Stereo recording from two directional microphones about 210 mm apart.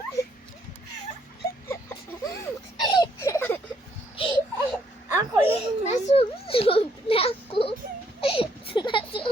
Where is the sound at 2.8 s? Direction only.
20° left (ahead or behind).